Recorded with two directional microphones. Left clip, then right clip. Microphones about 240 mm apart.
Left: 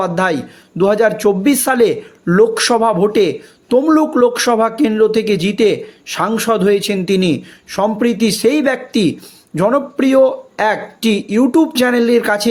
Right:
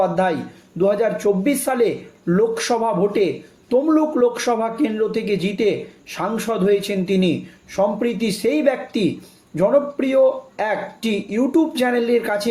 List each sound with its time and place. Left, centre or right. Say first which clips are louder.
0.0 s speech: left 3 dB; left